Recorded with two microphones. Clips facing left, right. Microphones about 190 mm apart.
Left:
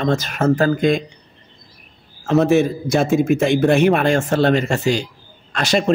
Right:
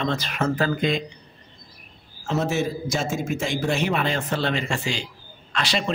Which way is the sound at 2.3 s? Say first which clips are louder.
Left 9 dB; 60° left (ahead or behind).